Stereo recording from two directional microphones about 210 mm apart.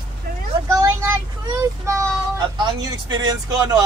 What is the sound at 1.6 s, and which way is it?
Child singing, 15° right (ahead or behind).